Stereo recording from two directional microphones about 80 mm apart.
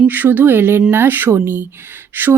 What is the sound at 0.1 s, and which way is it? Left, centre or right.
Speech, right.